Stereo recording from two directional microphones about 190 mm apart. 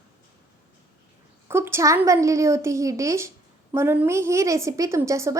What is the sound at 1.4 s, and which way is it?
A woman's voice, 15° right (ahead or behind).